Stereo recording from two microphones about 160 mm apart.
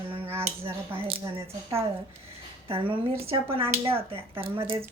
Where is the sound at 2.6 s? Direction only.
35° right (ahead or behind).